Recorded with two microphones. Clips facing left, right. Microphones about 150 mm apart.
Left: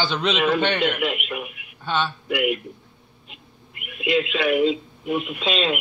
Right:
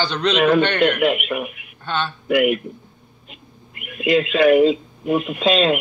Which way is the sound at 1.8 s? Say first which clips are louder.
Even; 5° left (ahead or behind).